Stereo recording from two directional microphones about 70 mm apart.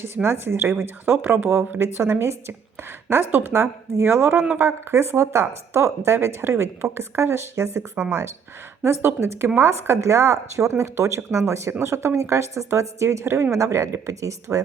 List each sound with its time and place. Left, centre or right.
0.0 s speech: right
8.8 s a woman's voice: right